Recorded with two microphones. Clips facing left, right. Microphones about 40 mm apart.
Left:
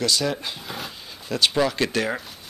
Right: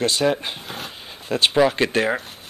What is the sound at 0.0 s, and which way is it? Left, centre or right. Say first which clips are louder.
Speech: right 4 dB; right.